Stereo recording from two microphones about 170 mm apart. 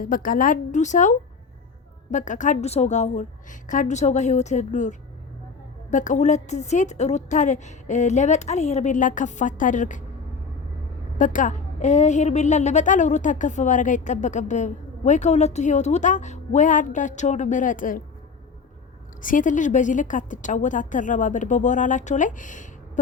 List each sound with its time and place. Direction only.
0.0 s a woman's voice: 55° left (ahead or behind)
11.2 s a woman's voice: 50° left (ahead or behind)
19.2 s a woman's voice: 50° left (ahead or behind)